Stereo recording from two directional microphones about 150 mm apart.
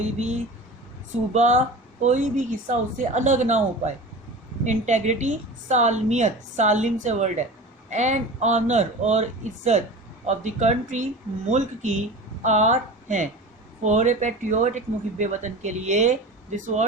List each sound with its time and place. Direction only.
0.0 s speech: 50° right (ahead or behind)